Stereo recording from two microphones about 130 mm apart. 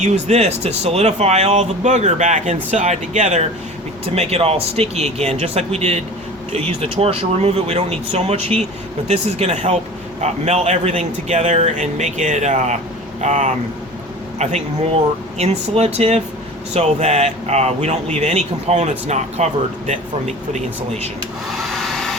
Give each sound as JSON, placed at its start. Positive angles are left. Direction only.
{"t": 0.0, "sound": "speech", "side_deg": -60}
{"t": 21.6, "sound": "hair dryer", "side_deg": 0}